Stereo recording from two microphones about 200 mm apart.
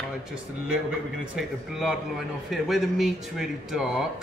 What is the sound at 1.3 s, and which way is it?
A man's voice, centre (ahead or behind).